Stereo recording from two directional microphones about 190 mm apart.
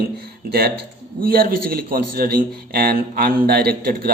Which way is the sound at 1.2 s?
50° right (ahead or behind).